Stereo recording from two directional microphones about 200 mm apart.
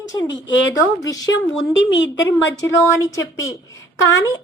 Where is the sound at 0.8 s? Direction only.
15° left (ahead or behind).